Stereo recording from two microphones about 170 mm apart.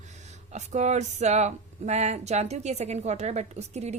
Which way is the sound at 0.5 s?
40° right (ahead or behind).